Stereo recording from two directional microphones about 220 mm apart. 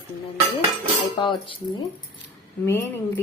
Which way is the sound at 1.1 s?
20° left (ahead or behind).